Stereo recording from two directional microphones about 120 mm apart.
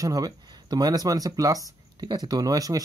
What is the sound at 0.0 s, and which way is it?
Speech, 30° right (ahead or behind).